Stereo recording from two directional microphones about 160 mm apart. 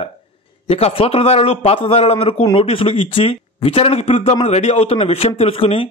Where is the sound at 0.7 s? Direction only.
40° left (ahead or behind).